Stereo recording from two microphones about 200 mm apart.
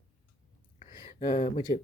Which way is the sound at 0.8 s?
30° left (ahead or behind).